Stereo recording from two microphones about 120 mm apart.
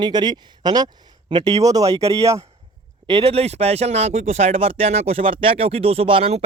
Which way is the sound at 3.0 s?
45° right (ahead or behind).